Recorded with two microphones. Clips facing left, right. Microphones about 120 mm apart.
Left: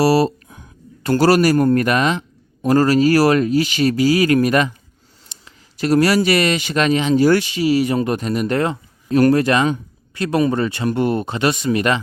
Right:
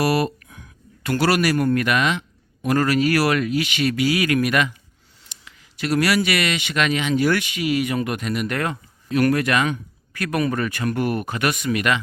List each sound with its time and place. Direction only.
0.0 s speech: 30° left (ahead or behind)